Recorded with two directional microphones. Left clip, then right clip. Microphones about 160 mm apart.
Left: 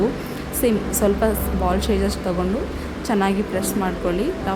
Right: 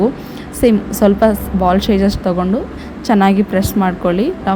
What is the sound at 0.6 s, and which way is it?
A woman's voice, 35° right (ahead or behind).